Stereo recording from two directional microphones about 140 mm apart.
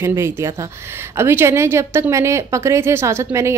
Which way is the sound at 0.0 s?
20° right (ahead or behind).